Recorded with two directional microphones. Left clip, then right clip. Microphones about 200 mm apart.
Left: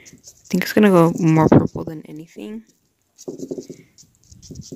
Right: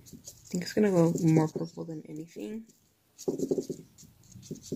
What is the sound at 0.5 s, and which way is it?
Speech, 40° left (ahead or behind).